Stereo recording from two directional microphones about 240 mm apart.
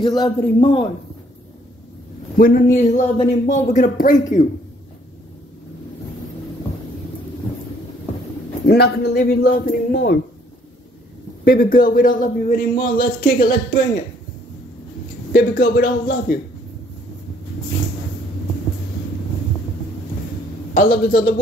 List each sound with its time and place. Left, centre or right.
0.0 s a man's voice: centre
2.3 s speech: left
8.6 s speech: left
11.4 s speech: left
15.3 s speech: left
20.7 s speech: left